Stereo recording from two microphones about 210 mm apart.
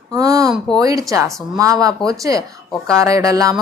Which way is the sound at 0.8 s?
15° right (ahead or behind).